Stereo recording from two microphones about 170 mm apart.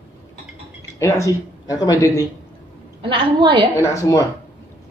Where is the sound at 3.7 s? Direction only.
20° left (ahead or behind).